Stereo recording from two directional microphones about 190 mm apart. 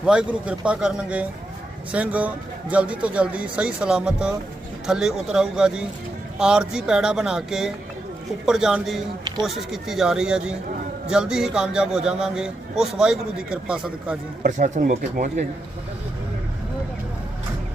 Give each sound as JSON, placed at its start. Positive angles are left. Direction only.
{"t": 0.0, "sound": "a man's voice", "side_deg": -5}
{"t": 14.4, "sound": "speech", "side_deg": -40}